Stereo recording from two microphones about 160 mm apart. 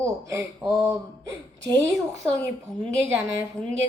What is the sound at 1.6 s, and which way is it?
Speech, 20° right (ahead or behind).